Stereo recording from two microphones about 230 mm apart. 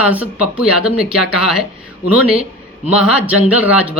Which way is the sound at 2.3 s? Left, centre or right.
Right.